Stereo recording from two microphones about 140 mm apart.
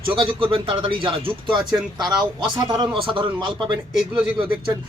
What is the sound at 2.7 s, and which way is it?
Speech, 35° right (ahead or behind).